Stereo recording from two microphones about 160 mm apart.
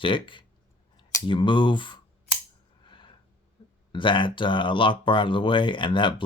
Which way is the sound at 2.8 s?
30° left (ahead or behind).